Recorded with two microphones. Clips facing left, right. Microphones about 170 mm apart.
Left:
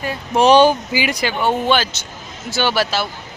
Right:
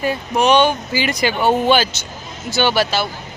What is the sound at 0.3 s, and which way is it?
Speech, 35° left (ahead or behind).